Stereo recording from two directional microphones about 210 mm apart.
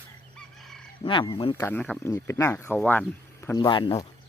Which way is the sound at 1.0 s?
25° left (ahead or behind).